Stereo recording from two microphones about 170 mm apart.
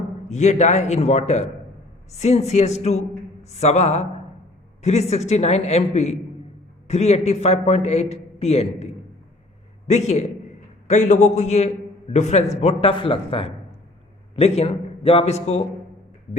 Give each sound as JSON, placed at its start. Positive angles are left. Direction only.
{"t": 0.3, "sound": "a man's voice", "side_deg": 45}